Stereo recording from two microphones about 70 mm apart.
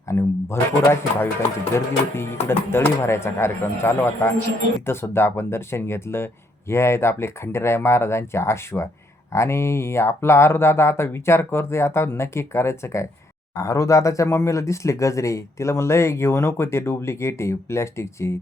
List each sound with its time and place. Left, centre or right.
0.1 s a man's voice: left